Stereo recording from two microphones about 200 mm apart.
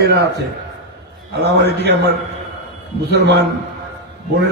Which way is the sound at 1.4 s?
55° right (ahead or behind).